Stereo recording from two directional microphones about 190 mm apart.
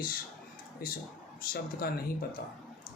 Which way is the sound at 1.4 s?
50° left (ahead or behind).